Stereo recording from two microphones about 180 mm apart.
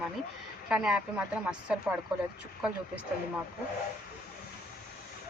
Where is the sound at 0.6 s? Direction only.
5° right (ahead or behind).